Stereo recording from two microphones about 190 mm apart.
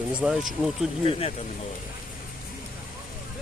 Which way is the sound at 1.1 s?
30° left (ahead or behind).